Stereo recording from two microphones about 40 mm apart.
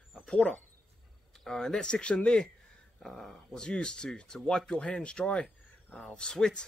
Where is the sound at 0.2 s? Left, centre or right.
Left.